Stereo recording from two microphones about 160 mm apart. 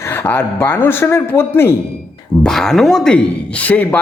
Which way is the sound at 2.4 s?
Centre (ahead or behind).